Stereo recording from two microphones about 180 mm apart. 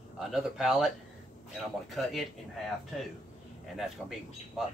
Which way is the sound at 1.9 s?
Centre (ahead or behind).